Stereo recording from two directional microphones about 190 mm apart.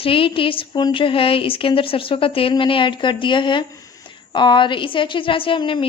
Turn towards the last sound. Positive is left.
turn(degrees=25)  # may be behind; listen again after turning